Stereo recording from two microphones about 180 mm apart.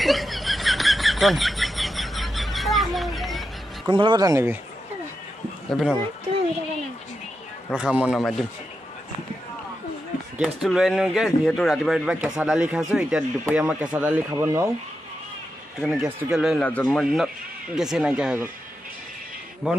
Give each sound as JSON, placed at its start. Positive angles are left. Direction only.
{"t": 0.0, "sound": "a sound", "side_deg": 0}
{"t": 3.8, "sound": "speech", "side_deg": -25}
{"t": 5.7, "sound": "speech", "side_deg": 0}
{"t": 7.7, "sound": "speech", "side_deg": -5}
{"t": 10.4, "sound": "speech", "side_deg": 0}
{"t": 15.8, "sound": "speech", "side_deg": 0}